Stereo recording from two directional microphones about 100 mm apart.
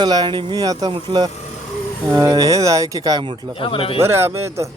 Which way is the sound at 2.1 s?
35° right (ahead or behind).